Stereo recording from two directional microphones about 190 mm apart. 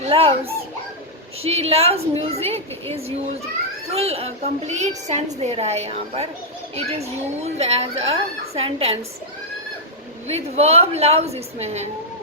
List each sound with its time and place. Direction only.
0.1 s a child's voice: 30° right (ahead or behind)
3.9 s a child's voice: 30° right (ahead or behind)
10.2 s a child's voice: 35° right (ahead or behind)